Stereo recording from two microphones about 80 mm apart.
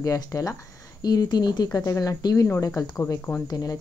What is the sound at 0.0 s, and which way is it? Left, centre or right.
Speech, left.